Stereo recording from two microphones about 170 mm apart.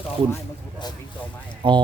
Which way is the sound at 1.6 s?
30° right (ahead or behind).